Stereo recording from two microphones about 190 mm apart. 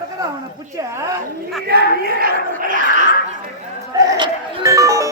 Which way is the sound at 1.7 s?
55° right (ahead or behind).